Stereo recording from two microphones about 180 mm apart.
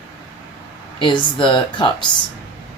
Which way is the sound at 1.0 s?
25° left (ahead or behind).